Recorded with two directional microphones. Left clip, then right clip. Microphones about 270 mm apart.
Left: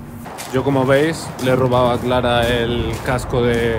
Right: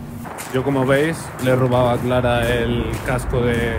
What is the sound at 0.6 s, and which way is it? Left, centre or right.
Speech, centre.